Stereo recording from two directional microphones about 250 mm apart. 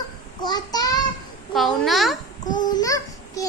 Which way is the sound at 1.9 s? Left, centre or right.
Centre.